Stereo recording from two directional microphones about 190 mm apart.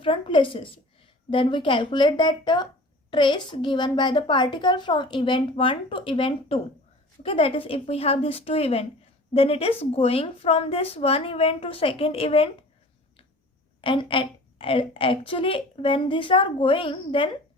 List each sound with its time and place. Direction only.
0.0 s a woman's voice: 25° left (ahead or behind)
13.8 s a woman's voice: 25° left (ahead or behind)